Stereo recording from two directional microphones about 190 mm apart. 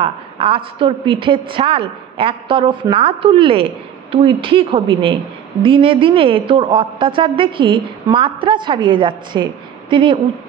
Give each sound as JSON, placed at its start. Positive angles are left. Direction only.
{"t": 0.0, "sound": "a woman's voice", "side_deg": -30}